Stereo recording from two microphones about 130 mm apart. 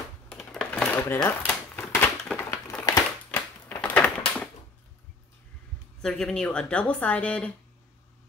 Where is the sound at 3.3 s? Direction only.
15° left (ahead or behind).